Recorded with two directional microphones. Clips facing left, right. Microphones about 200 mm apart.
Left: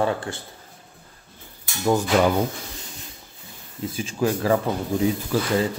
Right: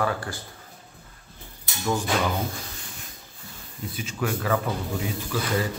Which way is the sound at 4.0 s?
30° left (ahead or behind).